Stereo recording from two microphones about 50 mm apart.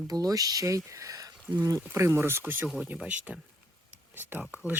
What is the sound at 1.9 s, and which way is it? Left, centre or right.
Speech, right.